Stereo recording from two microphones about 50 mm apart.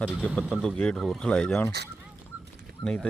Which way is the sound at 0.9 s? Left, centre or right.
Centre.